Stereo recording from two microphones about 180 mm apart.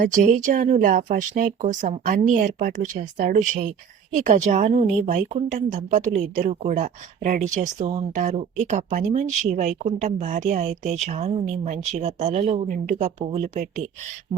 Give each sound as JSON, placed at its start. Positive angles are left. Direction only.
{"t": 0.0, "sound": "a woman's voice", "side_deg": -45}